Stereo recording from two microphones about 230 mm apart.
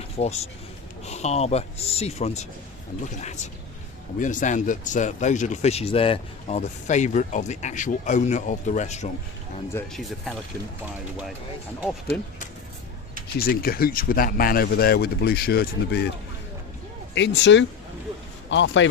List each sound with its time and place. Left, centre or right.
0.2 s speech: left
4.2 s speech: left
9.7 s speech: centre
12.1 s speech: centre
13.4 s speech: left
17.2 s speech: left